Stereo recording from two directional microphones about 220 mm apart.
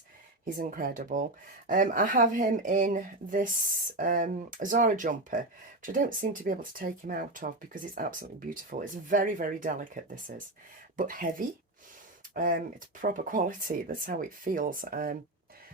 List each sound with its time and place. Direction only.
0.4 s speech: 40° right (ahead or behind)